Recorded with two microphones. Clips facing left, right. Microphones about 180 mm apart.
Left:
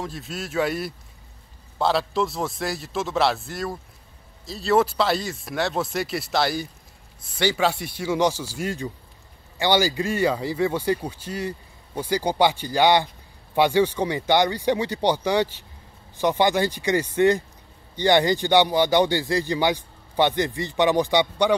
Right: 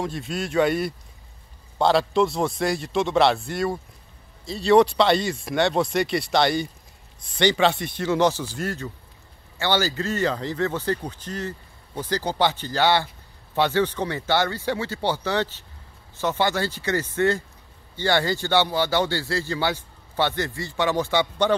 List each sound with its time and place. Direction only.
0.0 s speech: centre (ahead or behind)